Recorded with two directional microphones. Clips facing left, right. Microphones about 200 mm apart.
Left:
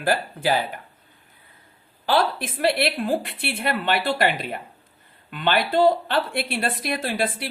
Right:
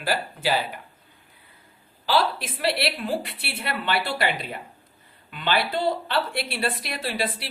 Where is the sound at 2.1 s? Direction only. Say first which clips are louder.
Left 2 dB; 50° left (ahead or behind).